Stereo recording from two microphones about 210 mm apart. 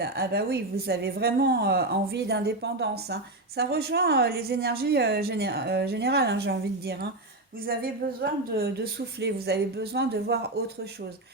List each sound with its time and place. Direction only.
0.0 s a woman's voice: 50° right (ahead or behind)